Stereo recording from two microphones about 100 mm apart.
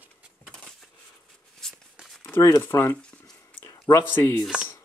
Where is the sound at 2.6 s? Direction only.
20° left (ahead or behind).